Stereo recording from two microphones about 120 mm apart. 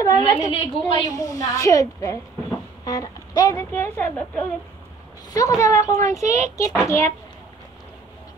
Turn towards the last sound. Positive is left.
turn(degrees=25)  # may be behind; listen again after turning